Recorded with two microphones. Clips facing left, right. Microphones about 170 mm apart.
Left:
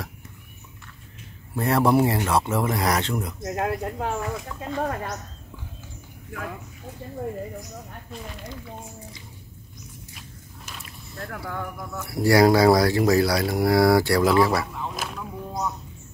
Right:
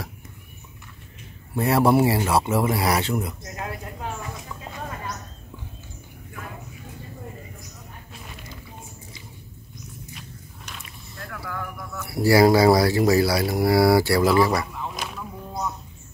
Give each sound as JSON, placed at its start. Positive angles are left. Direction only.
{"t": 1.5, "sound": "speech", "side_deg": -5}
{"t": 3.5, "sound": "speech", "side_deg": 60}
{"t": 10.1, "sound": "walk", "side_deg": 0}
{"t": 11.1, "sound": "speech", "side_deg": 30}
{"t": 12.1, "sound": "speech", "side_deg": -5}